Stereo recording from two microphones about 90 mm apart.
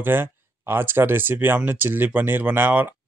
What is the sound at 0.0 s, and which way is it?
Speech, 25° right (ahead or behind).